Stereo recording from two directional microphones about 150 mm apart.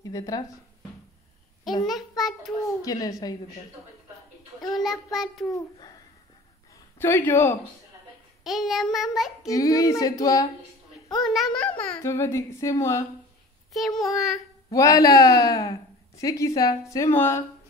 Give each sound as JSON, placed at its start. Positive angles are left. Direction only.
{"t": 0.0, "sound": "speech", "side_deg": 25}
{"t": 1.9, "sound": "a sound", "side_deg": 0}
{"t": 2.8, "sound": "speech", "side_deg": 25}
{"t": 4.7, "sound": "child singing", "side_deg": 0}
{"t": 7.0, "sound": "a child's voice", "side_deg": 15}
{"t": 8.5, "sound": "child singing", "side_deg": 0}
{"t": 9.5, "sound": "speech", "side_deg": 20}
{"t": 11.2, "sound": "a child's voice", "side_deg": 5}
{"t": 13.7, "sound": "child singing", "side_deg": 0}
{"t": 14.7, "sound": "speech", "side_deg": 25}